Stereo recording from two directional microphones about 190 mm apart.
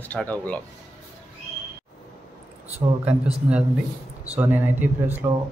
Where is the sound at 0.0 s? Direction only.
10° left (ahead or behind).